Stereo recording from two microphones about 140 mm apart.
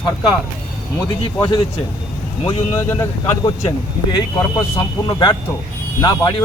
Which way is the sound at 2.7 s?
20° left (ahead or behind).